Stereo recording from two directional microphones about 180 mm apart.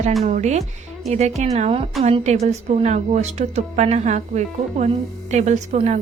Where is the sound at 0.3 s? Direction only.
40° right (ahead or behind).